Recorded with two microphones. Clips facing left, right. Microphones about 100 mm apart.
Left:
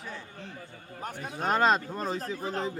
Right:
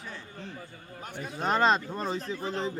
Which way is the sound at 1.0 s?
45° left (ahead or behind).